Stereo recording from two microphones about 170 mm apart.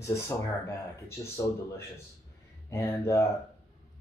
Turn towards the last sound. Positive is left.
turn(degrees=15)  # may be behind; listen again after turning